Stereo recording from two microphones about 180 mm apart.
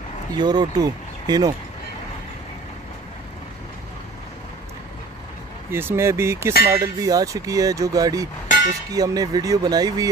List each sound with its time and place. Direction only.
0.4 s speech: 20° right (ahead or behind)
5.7 s speech: 15° right (ahead or behind)